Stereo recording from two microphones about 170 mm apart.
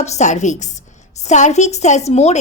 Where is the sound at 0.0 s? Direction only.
45° left (ahead or behind).